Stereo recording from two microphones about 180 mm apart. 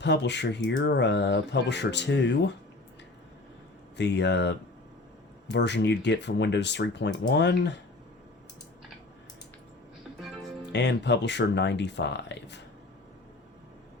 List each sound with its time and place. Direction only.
0.0 s speech: 70° left (ahead or behind)
3.9 s speech: 75° left (ahead or behind)
10.7 s speech: 70° left (ahead or behind)